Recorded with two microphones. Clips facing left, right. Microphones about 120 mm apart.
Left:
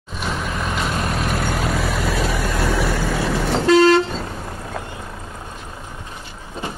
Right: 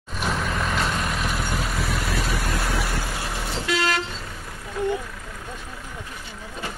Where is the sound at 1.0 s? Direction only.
40° left (ahead or behind).